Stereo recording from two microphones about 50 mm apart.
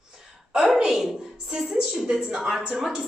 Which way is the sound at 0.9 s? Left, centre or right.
Centre.